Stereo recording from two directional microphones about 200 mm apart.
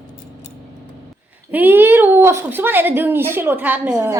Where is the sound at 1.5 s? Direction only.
10° right (ahead or behind).